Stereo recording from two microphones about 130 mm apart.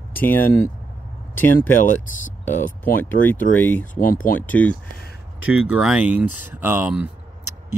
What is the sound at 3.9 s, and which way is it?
Speech, 90° left.